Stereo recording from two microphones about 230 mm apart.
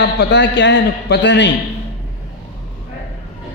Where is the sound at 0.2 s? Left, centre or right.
Left.